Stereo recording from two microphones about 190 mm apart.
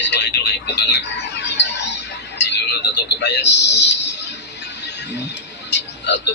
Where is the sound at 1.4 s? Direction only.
65° left (ahead or behind).